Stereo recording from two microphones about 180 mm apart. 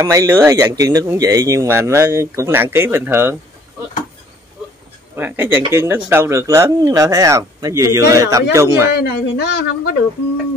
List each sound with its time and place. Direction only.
0.0 s speech: 15° right (ahead or behind)
5.1 s speech: 10° right (ahead or behind)
8.9 s speech: 65° left (ahead or behind)